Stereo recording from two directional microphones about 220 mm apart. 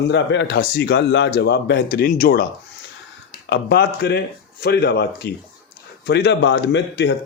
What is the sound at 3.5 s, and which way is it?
A man's voice, 45° left (ahead or behind).